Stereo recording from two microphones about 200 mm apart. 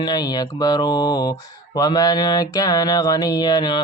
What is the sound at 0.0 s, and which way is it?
Speech, 20° left (ahead or behind).